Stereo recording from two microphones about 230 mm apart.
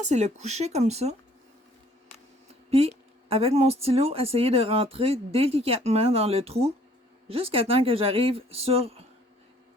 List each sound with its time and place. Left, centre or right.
0.0 s a woman's voice: right
2.6 s a woman's voice: right